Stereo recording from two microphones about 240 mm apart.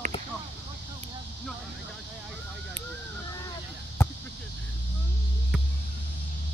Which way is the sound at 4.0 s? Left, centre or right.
Centre.